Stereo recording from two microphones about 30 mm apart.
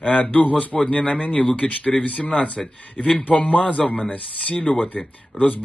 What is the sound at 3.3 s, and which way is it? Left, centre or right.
Speech, left.